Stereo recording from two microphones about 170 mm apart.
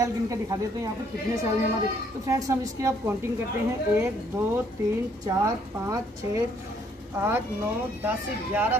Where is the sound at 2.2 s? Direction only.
15° right (ahead or behind).